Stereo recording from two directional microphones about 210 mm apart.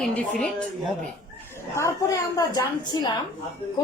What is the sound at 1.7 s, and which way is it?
A woman's voice, 15° left (ahead or behind).